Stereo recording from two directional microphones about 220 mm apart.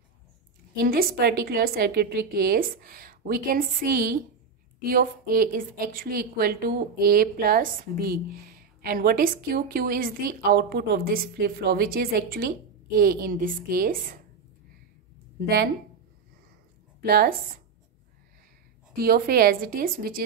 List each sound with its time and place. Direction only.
0.7 s a woman's voice: 40° right (ahead or behind)
15.4 s a woman's voice: 45° right (ahead or behind)
17.0 s a woman's voice: 45° right (ahead or behind)
18.9 s a woman's voice: 40° right (ahead or behind)